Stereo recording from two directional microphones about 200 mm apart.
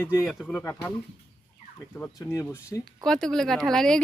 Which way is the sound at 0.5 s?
10° left (ahead or behind).